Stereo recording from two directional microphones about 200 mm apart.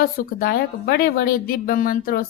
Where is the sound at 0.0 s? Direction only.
45° left (ahead or behind).